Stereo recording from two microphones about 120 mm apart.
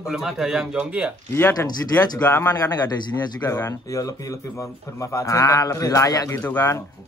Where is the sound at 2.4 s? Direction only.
30° left (ahead or behind).